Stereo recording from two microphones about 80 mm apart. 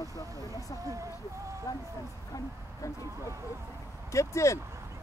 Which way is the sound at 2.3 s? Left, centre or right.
Left.